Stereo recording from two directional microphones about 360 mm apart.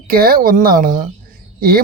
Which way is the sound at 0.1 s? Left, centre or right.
Right.